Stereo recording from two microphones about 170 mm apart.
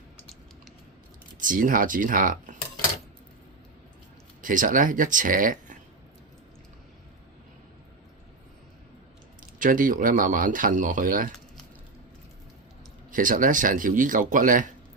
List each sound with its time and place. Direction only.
1.4 s speech: 50° right (ahead or behind)
4.4 s speech: 50° right (ahead or behind)
9.4 s speech: 50° right (ahead or behind)
13.1 s speech: 50° right (ahead or behind)